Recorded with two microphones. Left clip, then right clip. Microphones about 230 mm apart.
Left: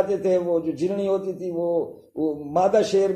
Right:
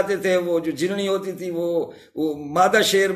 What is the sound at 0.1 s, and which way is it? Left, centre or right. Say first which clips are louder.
A man's voice: right 1 dB; right.